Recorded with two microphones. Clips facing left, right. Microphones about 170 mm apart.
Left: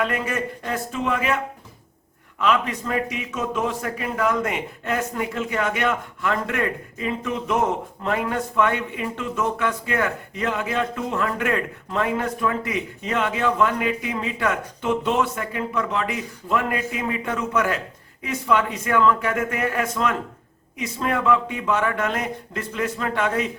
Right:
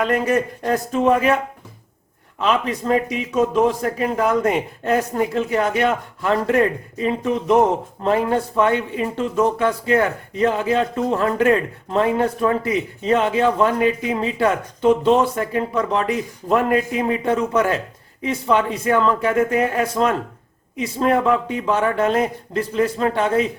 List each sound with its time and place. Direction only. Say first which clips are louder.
0.0 s speech: right 6 dB; 40° right (ahead or behind)
2.4 s speech: right 2 dB; 30° right (ahead or behind)